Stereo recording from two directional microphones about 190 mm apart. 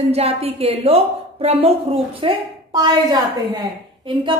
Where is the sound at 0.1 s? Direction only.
30° right (ahead or behind).